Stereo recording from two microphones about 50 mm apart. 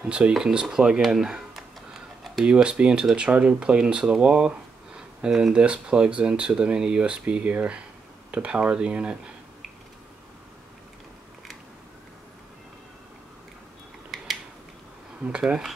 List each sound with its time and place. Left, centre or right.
0.0 s speech: right
1.5 s a sound: centre
2.4 s speech: centre
15.2 s speech: centre